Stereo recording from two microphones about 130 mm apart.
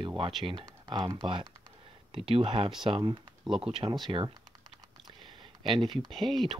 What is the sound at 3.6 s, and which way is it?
Speech, 50° right (ahead or behind).